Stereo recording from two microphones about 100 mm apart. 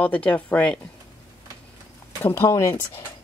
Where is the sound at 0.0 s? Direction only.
15° left (ahead or behind).